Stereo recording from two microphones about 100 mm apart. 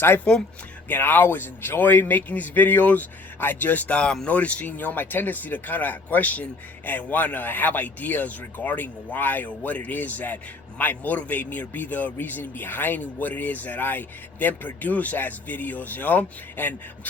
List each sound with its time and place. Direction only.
0.3 s a man's voice: 10° left (ahead or behind)